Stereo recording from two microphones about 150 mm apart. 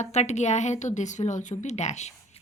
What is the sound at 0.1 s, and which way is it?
A woman's voice, 50° left (ahead or behind).